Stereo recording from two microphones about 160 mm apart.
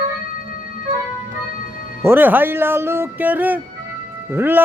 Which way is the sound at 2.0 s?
10° right (ahead or behind).